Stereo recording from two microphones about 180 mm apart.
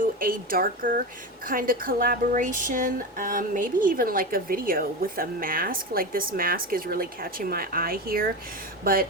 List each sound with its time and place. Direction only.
0.0 s speech: 50° right (ahead or behind)